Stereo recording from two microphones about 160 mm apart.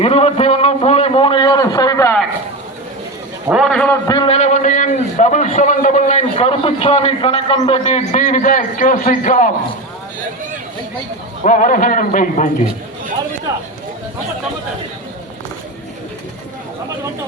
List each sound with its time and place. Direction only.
0.0 s a sound: 40° left (ahead or behind); by 2.1 s 20° left (ahead or behind)
3.5 s a man's voice: centre (ahead or behind)
4.0 s a man's voice: 25° left (ahead or behind)
4.3 s a man's voice: 45° left (ahead or behind)
7.9 s a man's voice: 45° left (ahead or behind)
11.4 s a man's voice: 55° left (ahead or behind)